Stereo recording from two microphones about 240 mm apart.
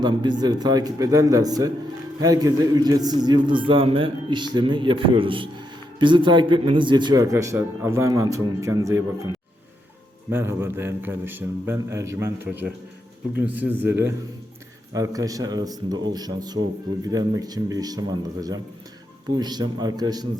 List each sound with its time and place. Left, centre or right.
0.0 s a man's voice: centre
10.2 s a man's voice: centre